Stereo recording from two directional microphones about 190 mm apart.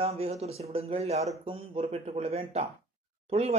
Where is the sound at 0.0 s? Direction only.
30° right (ahead or behind).